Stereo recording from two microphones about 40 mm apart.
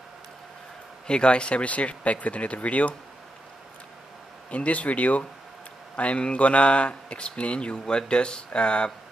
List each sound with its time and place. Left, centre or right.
1.0 s speech: left
4.5 s speech: left